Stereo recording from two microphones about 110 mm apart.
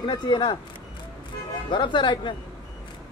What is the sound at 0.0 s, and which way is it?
Speech, 40° left (ahead or behind).